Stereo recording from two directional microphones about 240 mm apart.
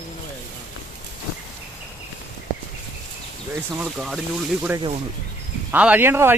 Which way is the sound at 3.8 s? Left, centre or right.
Centre.